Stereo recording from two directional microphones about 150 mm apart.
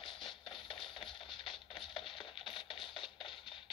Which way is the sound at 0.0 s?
35° left (ahead or behind).